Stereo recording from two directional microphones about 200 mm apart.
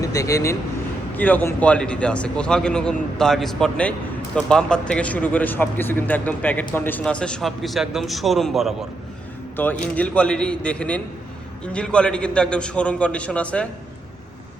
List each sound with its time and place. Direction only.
0.0 s speech: 15° left (ahead or behind); by 8.7 s centre (ahead or behind)
9.6 s a man's voice: 10° left (ahead or behind)